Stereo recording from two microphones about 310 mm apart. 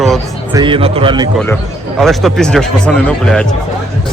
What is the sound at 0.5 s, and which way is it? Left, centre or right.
Speech, centre.